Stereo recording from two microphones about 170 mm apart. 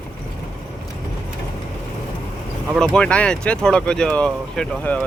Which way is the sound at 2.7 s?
5° left (ahead or behind).